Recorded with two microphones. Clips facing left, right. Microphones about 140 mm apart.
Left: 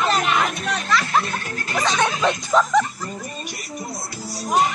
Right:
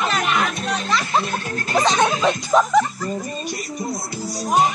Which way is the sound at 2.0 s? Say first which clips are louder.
Right 2 dB; 10° right (ahead or behind).